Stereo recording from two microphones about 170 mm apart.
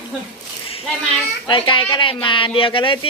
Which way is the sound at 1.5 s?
30° left (ahead or behind).